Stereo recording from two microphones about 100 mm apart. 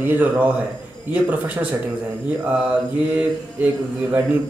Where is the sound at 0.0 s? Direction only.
20° right (ahead or behind).